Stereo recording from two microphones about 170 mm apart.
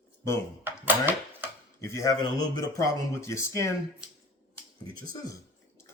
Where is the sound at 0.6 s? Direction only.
10° right (ahead or behind).